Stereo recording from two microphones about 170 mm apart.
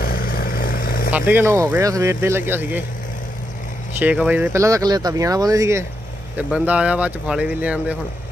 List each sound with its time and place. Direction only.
0.0 s vehicle: 60° left (ahead or behind)
1.1 s speech: 10° right (ahead or behind)
4.0 s speech: 10° right (ahead or behind)